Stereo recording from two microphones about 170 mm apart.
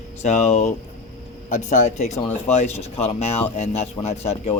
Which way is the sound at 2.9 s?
35° left (ahead or behind).